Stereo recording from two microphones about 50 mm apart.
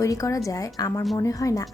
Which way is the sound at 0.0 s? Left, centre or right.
Left.